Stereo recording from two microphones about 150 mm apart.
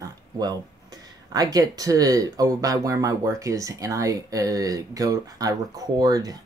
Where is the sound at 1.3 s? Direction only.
25° right (ahead or behind).